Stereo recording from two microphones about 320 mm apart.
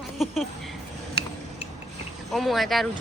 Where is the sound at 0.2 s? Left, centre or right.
Centre.